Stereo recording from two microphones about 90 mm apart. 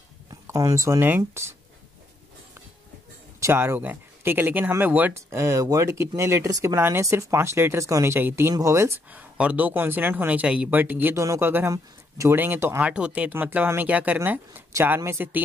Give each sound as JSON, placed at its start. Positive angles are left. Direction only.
{"t": 0.5, "sound": "speech", "side_deg": -35}
{"t": 3.5, "sound": "speech", "side_deg": -25}
{"t": 5.1, "sound": "speech", "side_deg": -35}
{"t": 6.8, "sound": "speech", "side_deg": -30}
{"t": 9.1, "sound": "speech", "side_deg": -15}
{"t": 11.1, "sound": "speech", "side_deg": -35}
{"t": 12.4, "sound": "speech", "side_deg": -25}
{"t": 12.8, "sound": "speech", "side_deg": -15}